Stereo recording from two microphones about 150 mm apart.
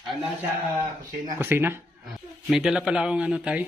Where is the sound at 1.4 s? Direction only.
15° right (ahead or behind).